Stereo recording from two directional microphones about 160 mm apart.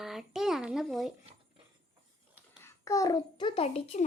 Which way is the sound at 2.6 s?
15° left (ahead or behind).